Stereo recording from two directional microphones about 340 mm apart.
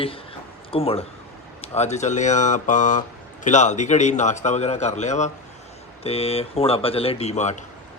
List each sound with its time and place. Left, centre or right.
0.7 s a man's voice: centre